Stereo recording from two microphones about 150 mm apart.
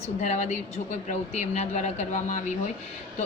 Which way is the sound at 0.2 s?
50° left (ahead or behind).